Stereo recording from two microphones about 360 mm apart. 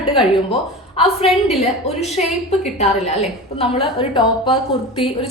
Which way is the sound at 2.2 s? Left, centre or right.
Centre.